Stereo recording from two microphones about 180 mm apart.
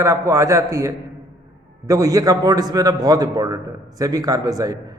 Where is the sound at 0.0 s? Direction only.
15° right (ahead or behind).